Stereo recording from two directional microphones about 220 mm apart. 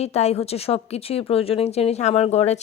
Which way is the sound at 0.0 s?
30° left (ahead or behind).